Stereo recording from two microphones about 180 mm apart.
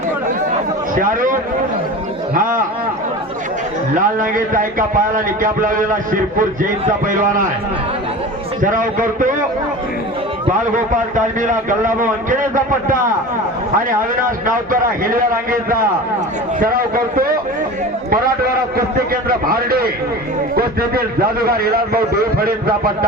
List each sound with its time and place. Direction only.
0.9 s a man's voice: 50° right (ahead or behind)
3.9 s a man's voice: 50° right (ahead or behind)
8.6 s a man's voice: 50° right (ahead or behind)
11.1 s a man's voice: 45° right (ahead or behind)
14.3 s a man's voice: 50° right (ahead or behind)
18.9 s a man's voice: 55° right (ahead or behind)